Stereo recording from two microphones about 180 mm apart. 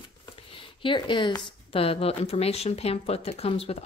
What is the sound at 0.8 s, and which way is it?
Speech, 25° left (ahead or behind).